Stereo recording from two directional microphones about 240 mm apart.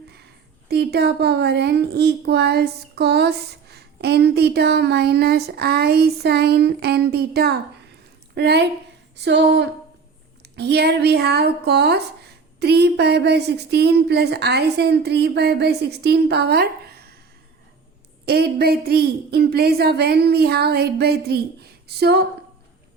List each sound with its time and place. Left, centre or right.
0.7 s speech: right
18.3 s a woman's voice: right